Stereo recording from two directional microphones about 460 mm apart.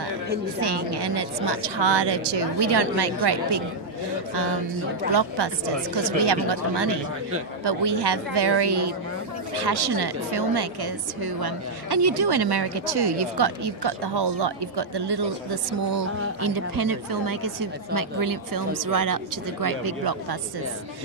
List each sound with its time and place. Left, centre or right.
0.6 s a woman's voice: right
5.1 s a woman's voice: right